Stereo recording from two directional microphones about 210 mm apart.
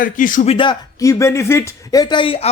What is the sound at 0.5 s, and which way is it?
Speech, 20° left (ahead or behind).